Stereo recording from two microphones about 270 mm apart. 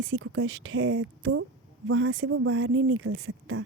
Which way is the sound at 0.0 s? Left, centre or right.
Right.